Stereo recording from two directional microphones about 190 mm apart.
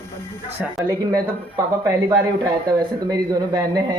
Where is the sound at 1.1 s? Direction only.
15° right (ahead or behind).